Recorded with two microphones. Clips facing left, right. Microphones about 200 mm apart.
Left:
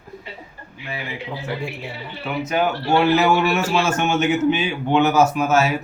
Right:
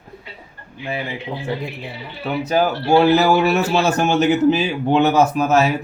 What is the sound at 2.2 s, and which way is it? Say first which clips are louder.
Speech: right 3 dB; 35° right (ahead or behind).